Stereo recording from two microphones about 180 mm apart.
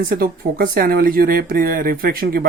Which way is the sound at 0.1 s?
50° right (ahead or behind).